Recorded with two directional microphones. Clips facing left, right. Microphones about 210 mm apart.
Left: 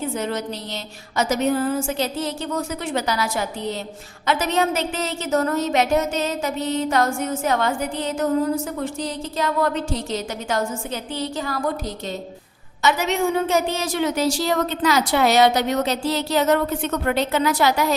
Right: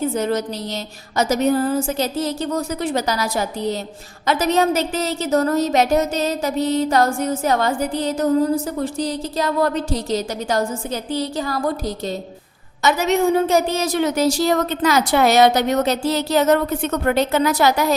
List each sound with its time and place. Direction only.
0.1 s a woman's voice: 40° right (ahead or behind)